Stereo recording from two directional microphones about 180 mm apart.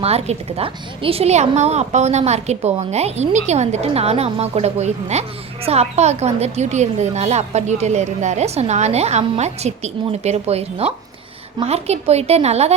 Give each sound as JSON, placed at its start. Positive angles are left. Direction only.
{"t": 0.0, "sound": "a woman's voice", "side_deg": -35}